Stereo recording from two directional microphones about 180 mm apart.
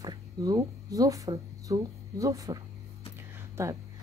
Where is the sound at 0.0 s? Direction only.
20° right (ahead or behind).